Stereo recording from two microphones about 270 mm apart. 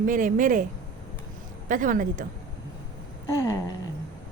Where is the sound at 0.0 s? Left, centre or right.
Right.